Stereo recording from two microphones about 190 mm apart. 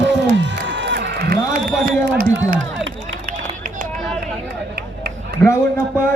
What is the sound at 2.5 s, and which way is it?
Run, 90° right.